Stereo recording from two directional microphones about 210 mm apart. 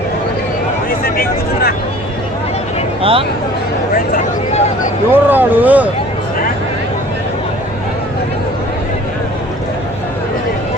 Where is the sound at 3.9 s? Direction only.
40° left (ahead or behind).